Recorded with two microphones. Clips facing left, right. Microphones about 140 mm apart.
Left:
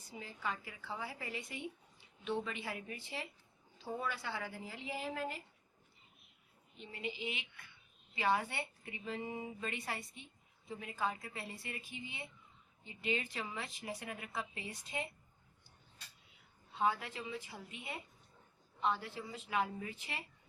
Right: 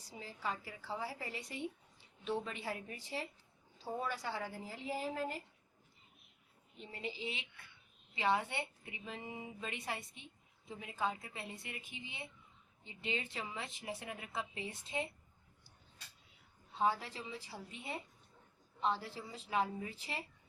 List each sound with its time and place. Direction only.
0.0 s a woman's voice: 35° right (ahead or behind)
6.7 s a woman's voice: 35° right (ahead or behind)
16.7 s a woman's voice: 35° right (ahead or behind)
18.8 s a woman's voice: 35° right (ahead or behind)